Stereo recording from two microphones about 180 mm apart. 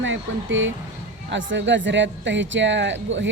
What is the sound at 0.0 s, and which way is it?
Speech, 90° right.